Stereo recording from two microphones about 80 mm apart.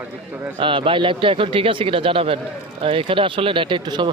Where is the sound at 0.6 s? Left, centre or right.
Right.